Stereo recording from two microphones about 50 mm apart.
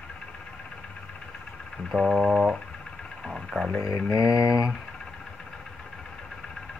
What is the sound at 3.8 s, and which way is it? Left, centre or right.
Mantra, left.